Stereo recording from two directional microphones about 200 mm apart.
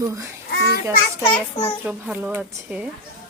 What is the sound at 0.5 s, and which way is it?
Speech, 55° left (ahead or behind).